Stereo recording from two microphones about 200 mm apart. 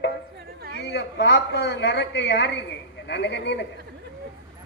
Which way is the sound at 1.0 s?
60° left (ahead or behind).